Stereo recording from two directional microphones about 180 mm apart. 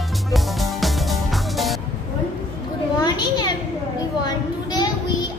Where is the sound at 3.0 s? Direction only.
25° left (ahead or behind).